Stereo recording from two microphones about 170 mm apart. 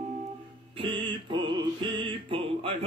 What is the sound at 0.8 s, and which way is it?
Music, 30° right (ahead or behind).